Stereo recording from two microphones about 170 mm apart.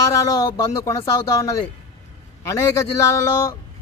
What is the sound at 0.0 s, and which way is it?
Speech, 20° left (ahead or behind).